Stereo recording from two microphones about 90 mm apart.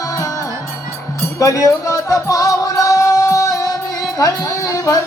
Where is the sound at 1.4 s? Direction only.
40° left (ahead or behind).